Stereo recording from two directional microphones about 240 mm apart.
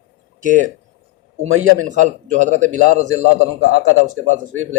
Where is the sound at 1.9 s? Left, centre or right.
Right.